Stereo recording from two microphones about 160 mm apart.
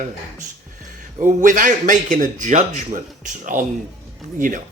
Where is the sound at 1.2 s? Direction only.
55° right (ahead or behind).